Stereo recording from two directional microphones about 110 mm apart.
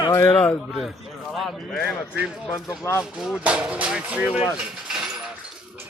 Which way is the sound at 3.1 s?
5° right (ahead or behind).